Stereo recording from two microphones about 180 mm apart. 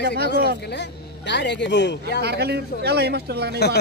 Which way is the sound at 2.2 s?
65° right (ahead or behind).